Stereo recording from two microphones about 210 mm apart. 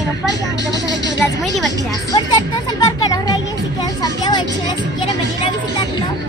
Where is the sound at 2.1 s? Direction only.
20° left (ahead or behind).